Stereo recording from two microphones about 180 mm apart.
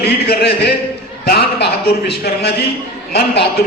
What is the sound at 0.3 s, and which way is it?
A man's voice, 65° left (ahead or behind).